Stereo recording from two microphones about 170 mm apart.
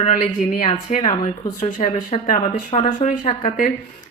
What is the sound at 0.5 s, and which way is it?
A woman's voice, 50° left (ahead or behind).